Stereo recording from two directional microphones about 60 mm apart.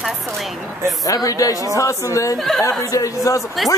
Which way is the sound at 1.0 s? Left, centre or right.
Left.